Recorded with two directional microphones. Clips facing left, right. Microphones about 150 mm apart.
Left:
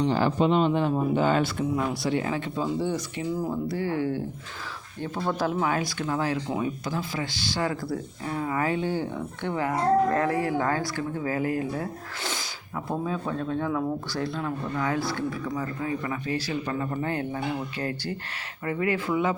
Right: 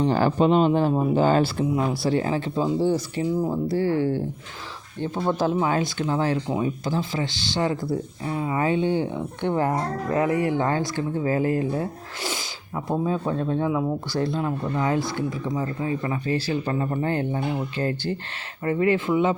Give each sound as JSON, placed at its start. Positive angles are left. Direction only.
{"t": 0.0, "sound": "speech", "side_deg": -45}